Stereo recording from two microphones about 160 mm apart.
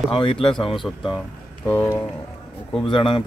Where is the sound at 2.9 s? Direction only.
30° left (ahead or behind).